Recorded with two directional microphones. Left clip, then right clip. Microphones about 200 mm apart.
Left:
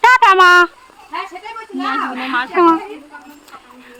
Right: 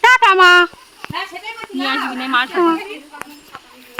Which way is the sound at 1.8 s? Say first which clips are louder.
Even; 40° right (ahead or behind).